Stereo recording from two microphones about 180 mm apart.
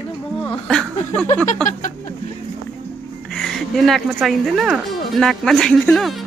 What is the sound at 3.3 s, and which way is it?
Speech, centre (ahead or behind).